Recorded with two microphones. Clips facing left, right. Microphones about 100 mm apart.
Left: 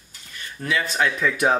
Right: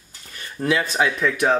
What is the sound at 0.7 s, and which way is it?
Speech, 5° right (ahead or behind).